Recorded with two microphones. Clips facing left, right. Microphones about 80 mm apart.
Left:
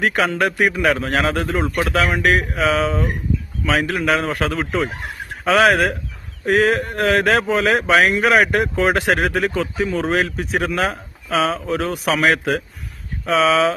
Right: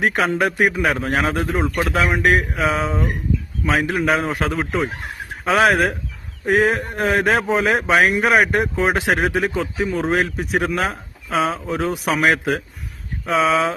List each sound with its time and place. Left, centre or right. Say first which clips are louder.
0.0 s speech: even; centre